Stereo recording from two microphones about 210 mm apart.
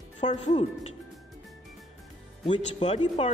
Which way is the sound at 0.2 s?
35° left (ahead or behind).